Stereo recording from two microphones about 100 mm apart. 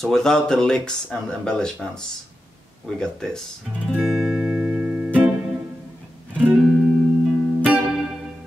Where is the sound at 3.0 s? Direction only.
5° left (ahead or behind).